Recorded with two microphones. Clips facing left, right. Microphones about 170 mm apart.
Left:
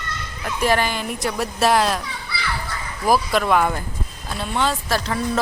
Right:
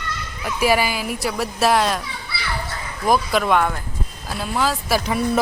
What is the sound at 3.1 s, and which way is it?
Speech, centre (ahead or behind).